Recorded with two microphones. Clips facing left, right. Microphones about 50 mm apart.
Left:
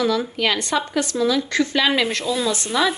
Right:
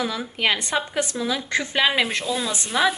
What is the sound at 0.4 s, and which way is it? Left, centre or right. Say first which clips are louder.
Speech: left 2 dB; right.